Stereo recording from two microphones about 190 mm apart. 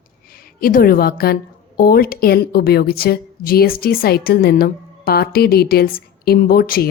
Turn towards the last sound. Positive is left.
turn(degrees=55)  # may be behind; listen again after turning